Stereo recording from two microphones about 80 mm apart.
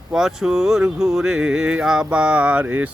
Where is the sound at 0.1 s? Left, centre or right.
Centre.